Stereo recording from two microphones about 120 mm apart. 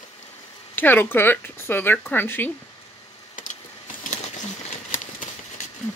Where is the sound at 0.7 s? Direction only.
15° left (ahead or behind).